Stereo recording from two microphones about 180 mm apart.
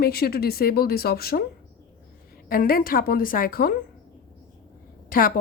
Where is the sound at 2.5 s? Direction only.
55° left (ahead or behind).